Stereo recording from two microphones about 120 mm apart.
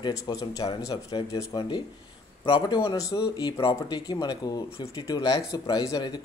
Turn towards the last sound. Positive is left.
turn(degrees=30)  # may be behind; listen again after turning